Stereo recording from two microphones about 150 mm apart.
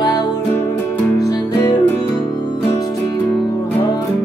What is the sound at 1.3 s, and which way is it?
Music, 25° left (ahead or behind).